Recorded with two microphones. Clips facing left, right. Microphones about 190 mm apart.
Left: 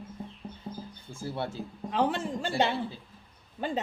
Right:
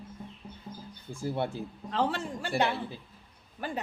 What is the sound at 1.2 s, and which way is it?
Speech, 15° right (ahead or behind).